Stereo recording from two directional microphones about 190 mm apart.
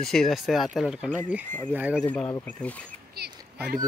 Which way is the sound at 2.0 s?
5° left (ahead or behind).